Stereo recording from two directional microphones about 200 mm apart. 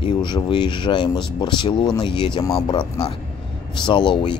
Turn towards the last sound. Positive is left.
turn(degrees=25)  # may be behind; listen again after turning